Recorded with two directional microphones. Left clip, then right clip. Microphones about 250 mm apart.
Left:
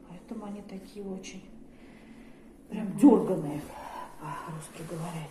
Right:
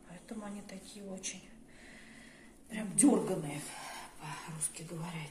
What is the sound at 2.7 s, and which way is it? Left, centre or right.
Speech, right.